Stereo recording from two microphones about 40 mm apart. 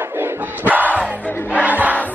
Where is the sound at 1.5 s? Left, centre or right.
Right.